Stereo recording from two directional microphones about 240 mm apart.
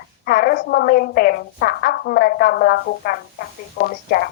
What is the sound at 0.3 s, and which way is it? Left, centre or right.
A woman's voice, left.